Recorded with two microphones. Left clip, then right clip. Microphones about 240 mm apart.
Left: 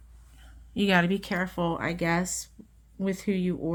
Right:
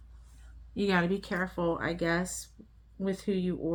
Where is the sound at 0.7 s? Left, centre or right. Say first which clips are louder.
Left 4 dB; left.